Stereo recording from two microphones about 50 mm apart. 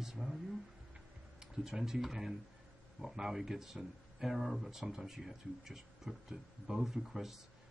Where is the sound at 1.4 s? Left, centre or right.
Centre.